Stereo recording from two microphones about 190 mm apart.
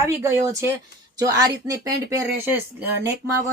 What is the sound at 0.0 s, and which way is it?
Speech, 15° right (ahead or behind).